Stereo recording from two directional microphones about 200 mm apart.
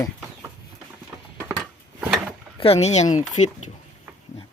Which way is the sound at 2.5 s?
30° left (ahead or behind).